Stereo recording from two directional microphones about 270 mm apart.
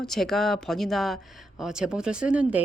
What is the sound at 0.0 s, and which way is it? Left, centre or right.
A woman's voice, centre.